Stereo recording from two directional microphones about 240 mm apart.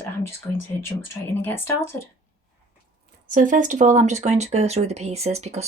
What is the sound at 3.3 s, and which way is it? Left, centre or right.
Speech, right.